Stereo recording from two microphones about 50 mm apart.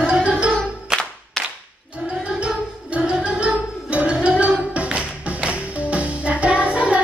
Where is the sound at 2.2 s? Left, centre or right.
Right.